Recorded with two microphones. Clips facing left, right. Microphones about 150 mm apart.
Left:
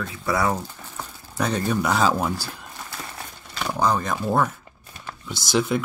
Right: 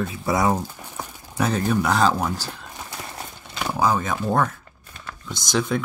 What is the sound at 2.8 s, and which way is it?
Horse, 20° right (ahead or behind).